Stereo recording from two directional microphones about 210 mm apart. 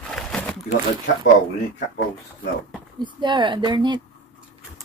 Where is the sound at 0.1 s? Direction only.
5° left (ahead or behind).